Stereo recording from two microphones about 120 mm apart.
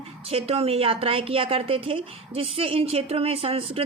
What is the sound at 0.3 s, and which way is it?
A woman's voice, 55° right (ahead or behind).